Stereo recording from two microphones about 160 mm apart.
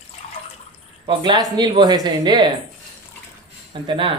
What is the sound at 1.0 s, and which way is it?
Speech, 30° right (ahead or behind).